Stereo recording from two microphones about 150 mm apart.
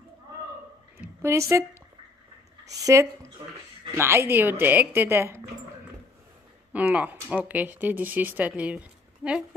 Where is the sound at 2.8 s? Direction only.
20° right (ahead or behind).